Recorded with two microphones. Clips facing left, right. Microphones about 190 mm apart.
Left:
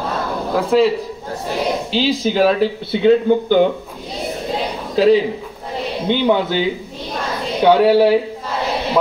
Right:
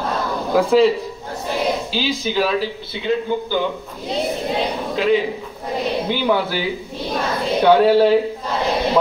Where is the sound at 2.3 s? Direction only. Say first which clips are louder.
Left 5 dB; 45° left (ahead or behind).